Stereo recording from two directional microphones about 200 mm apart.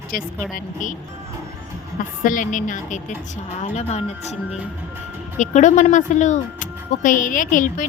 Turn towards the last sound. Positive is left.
turn(degrees=40)  # may be behind; listen again after turning